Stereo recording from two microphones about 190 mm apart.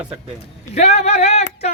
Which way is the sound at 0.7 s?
35° left (ahead or behind).